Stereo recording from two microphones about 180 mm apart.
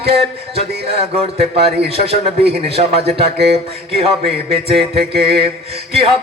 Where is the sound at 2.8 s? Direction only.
40° right (ahead or behind).